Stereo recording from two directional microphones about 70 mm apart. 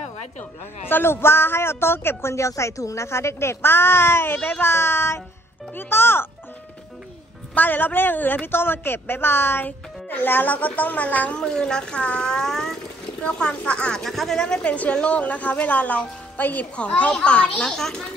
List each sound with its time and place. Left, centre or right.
0.4 s a man's voice: left
7.5 s a woman's voice: left
11.3 s a woman's voice: centre